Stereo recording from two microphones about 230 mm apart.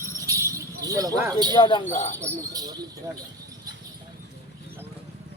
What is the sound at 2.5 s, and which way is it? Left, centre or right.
Speech, centre.